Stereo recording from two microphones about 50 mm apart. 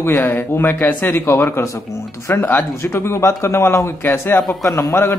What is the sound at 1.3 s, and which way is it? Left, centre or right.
Speech, left.